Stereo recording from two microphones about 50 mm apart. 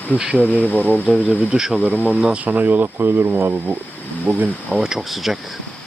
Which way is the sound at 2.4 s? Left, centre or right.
Right.